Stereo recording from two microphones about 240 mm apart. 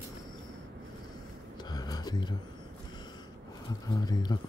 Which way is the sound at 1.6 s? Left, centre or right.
Centre.